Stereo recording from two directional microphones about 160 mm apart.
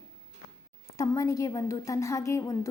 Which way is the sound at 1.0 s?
20° left (ahead or behind).